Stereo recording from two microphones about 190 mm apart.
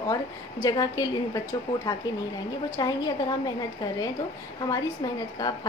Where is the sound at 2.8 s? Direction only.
20° left (ahead or behind).